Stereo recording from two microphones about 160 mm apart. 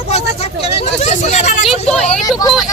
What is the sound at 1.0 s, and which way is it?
Speech, 45° left (ahead or behind).